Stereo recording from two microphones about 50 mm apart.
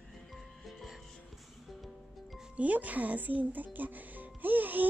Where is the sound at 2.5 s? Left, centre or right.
Right.